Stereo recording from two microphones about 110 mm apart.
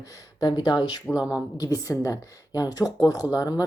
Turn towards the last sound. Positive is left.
turn(degrees=35)  # may be behind; listen again after turning